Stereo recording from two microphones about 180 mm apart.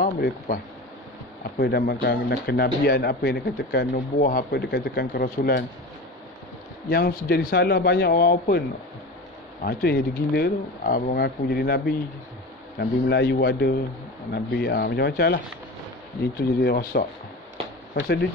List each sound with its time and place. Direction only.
0.0 s speech: 50° left (ahead or behind)
1.6 s speech: 60° left (ahead or behind)
3.9 s speech: 50° left (ahead or behind)
6.9 s speech: 55° left (ahead or behind)
12.7 s a man's voice: 70° left (ahead or behind)